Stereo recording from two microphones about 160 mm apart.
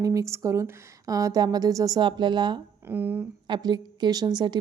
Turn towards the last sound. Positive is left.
turn(degrees=-25)  # may be behind; listen again after turning